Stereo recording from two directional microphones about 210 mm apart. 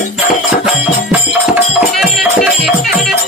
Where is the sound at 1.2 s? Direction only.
Centre (ahead or behind).